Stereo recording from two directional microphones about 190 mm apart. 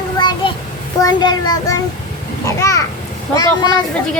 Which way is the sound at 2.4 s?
15° left (ahead or behind).